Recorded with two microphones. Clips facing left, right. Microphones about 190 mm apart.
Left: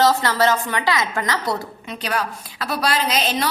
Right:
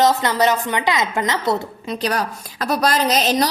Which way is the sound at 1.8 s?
35° right (ahead or behind).